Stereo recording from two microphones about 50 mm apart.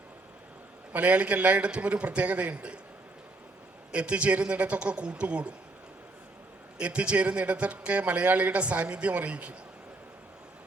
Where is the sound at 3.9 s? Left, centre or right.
Right.